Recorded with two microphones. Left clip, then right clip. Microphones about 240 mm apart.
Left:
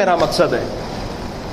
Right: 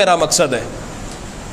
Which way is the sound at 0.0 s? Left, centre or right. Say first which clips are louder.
Right 1 dB; right.